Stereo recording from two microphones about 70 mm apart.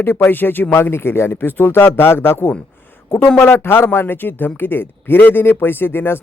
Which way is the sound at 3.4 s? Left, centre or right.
Left.